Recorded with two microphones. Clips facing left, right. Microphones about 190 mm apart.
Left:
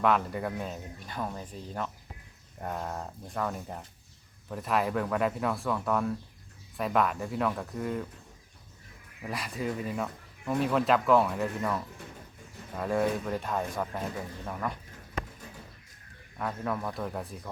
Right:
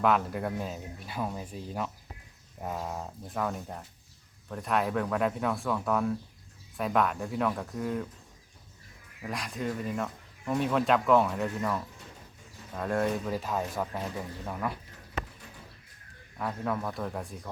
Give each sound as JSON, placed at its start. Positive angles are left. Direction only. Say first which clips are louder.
{"t": 0.0, "sound": "speech", "louder": "even", "side_deg": 0}
{"t": 9.2, "sound": "speech", "louder": "even", "side_deg": 5}
{"t": 16.4, "sound": "speech", "louder": "right 1 dB", "side_deg": 0}